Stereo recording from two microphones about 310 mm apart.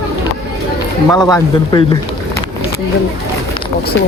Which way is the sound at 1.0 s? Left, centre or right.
Centre.